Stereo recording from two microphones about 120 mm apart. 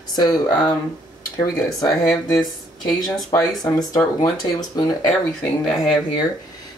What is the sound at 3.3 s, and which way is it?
Speech, 25° left (ahead or behind).